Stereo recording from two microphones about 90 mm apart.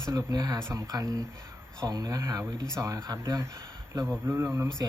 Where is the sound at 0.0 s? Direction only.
40° right (ahead or behind).